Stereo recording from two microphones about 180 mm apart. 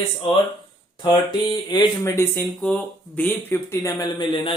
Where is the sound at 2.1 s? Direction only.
15° left (ahead or behind).